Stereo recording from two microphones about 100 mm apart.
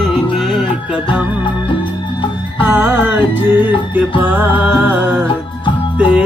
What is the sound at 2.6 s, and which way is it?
Music, 20° right (ahead or behind).